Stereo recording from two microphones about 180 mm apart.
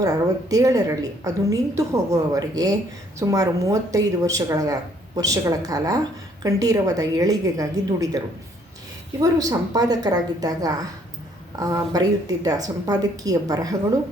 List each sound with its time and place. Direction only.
0.5 s a woman's voice: 20° right (ahead or behind)
9.2 s a woman's voice: 20° right (ahead or behind)